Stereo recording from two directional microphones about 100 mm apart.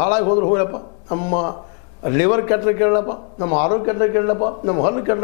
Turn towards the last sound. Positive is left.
turn(degrees=20)  # may be behind; listen again after turning